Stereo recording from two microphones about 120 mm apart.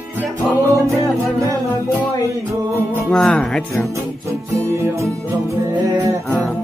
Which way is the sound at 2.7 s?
20° right (ahead or behind).